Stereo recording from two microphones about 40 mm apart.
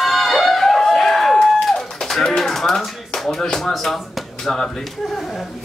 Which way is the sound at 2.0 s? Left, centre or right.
Centre.